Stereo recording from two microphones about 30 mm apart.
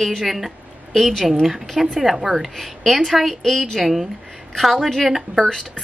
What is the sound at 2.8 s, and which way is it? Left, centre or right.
Speech, centre.